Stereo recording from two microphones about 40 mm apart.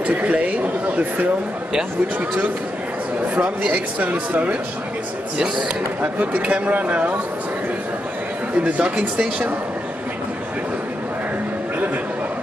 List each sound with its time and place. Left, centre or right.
0.0 s speech: right
3.3 s speech: right
6.3 s speech: right
8.7 s speech: right